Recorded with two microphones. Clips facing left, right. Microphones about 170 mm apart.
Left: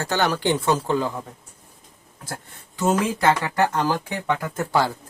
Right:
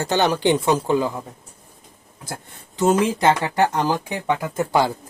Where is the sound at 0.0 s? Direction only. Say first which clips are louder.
Right 3 dB; 20° right (ahead or behind).